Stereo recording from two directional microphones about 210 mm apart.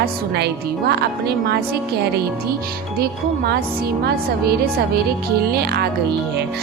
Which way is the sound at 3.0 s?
50° right (ahead or behind).